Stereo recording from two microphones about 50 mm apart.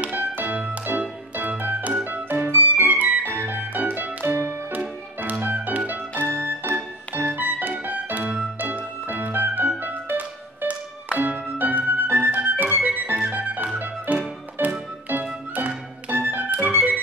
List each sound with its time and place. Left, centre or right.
0.0 s music: right
7.8 s organ: right
8.5 s music: right